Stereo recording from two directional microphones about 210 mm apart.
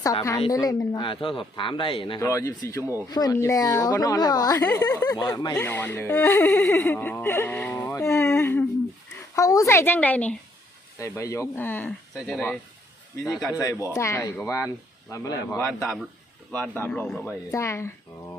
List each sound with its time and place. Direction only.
0.0 s a woman's voice: 15° left (ahead or behind); by 13.6 s centre (ahead or behind)
13.9 s a woman's voice: 15° left (ahead or behind)